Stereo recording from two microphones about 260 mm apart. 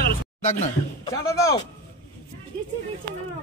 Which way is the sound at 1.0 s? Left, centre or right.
Centre.